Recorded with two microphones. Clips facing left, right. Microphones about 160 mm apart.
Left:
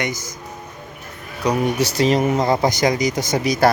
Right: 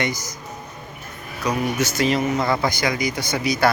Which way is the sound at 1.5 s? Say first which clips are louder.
Left 3 dB; 35° left (ahead or behind).